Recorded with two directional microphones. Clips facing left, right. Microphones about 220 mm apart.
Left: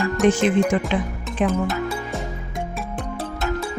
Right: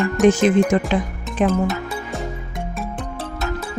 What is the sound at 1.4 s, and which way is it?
Speech, 45° right (ahead or behind).